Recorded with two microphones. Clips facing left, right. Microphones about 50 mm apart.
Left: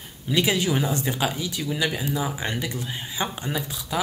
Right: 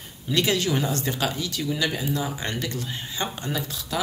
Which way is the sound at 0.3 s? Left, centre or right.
Centre.